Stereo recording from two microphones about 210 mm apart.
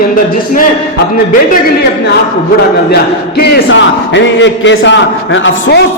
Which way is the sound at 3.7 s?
60° left (ahead or behind).